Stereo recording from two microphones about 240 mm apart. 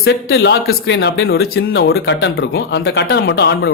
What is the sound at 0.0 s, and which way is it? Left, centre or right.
Speech, left.